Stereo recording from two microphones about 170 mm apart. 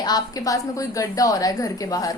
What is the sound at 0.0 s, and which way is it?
A woman's voice, 20° left (ahead or behind).